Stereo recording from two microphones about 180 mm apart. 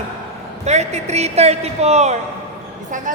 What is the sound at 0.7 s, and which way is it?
A woman's voice, 40° right (ahead or behind).